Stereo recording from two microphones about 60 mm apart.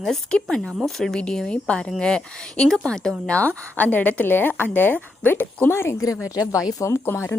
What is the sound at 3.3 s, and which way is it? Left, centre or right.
Speech, left.